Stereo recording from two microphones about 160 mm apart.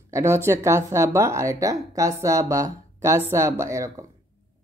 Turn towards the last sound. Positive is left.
turn(degrees=-20)  # may be behind; listen again after turning